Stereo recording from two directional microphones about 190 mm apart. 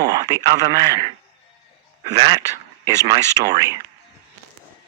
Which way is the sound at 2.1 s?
25° right (ahead or behind).